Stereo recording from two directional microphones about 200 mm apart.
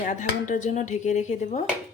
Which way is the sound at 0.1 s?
40° left (ahead or behind).